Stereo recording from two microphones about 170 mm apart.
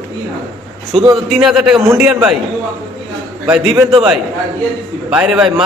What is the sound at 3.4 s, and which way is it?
A man's voice, centre (ahead or behind).